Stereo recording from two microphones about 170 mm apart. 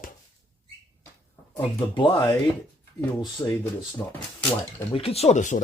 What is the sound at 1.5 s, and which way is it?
Speech, 25° left (ahead or behind).